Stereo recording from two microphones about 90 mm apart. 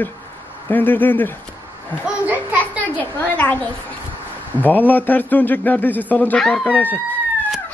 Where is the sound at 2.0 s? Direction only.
15° right (ahead or behind).